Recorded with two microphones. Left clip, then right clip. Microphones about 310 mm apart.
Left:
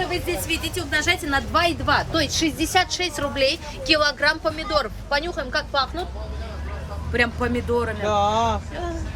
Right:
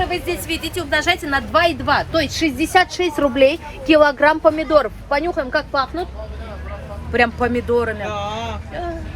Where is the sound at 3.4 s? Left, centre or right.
Centre.